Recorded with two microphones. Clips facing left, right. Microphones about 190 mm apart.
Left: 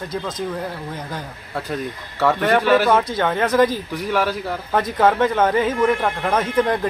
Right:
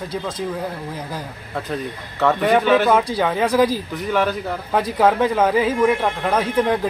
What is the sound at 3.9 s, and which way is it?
Speech, 5° left (ahead or behind).